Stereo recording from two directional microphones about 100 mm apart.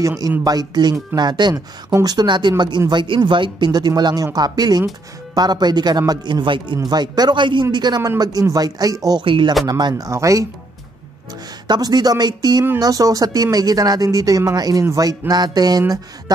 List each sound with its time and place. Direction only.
0.4 s speech: 40° right (ahead or behind)
9.2 s speech: 55° right (ahead or behind)
9.7 s speech: 40° right (ahead or behind)
11.6 s speech: 45° right (ahead or behind)